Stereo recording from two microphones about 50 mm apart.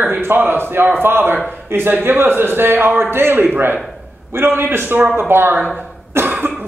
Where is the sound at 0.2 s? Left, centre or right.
Right.